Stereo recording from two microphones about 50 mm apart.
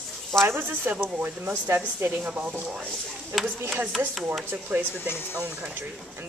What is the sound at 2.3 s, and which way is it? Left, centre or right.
Speech, right.